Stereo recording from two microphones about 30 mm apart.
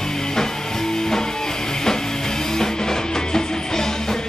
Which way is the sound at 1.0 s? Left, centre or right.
Centre.